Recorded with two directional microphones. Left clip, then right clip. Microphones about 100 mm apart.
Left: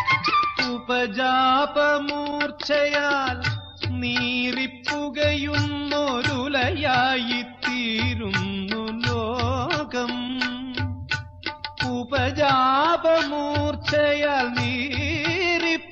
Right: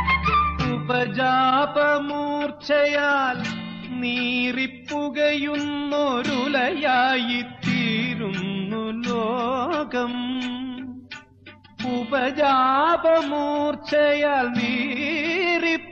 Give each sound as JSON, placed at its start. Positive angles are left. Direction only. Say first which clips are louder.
{"t": 0.2, "sound": "music", "louder": "even", "side_deg": -25}
{"t": 11.9, "sound": "music", "louder": "right 4 dB", "side_deg": -40}